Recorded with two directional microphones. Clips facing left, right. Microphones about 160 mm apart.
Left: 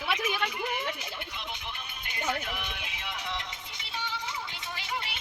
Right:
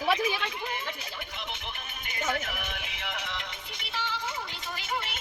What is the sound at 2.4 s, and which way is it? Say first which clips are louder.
Speech: right 1 dB; 45° right (ahead or behind).